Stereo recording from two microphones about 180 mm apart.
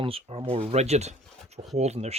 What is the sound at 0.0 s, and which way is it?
Speech, 30° right (ahead or behind).